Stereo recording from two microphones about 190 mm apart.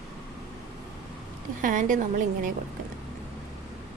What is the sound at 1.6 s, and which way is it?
Speech, 45° right (ahead or behind).